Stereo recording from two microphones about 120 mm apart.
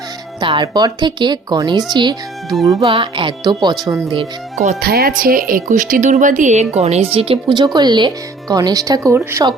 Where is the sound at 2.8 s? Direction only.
50° right (ahead or behind).